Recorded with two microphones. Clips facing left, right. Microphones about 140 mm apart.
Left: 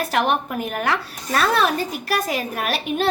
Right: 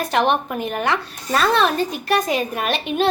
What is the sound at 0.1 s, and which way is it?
A woman's voice, 5° left (ahead or behind).